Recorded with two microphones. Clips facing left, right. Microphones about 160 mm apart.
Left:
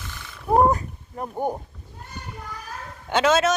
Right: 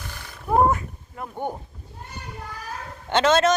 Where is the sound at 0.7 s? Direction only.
35° left (ahead or behind).